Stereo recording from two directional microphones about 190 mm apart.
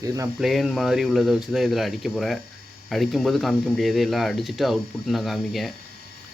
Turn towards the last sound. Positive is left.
turn(degrees=0)  # may be behind; listen again after turning